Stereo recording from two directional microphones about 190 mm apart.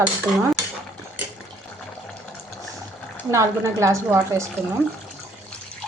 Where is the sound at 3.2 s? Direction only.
15° right (ahead or behind).